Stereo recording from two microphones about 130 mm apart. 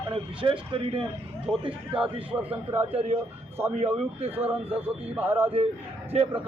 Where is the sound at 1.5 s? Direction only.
Centre (ahead or behind).